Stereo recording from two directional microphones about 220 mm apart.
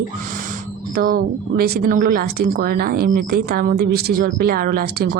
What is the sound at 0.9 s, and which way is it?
Speech, 40° right (ahead or behind).